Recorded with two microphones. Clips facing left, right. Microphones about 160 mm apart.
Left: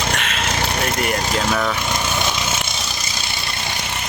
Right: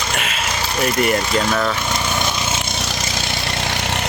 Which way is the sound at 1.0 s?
Centre (ahead or behind).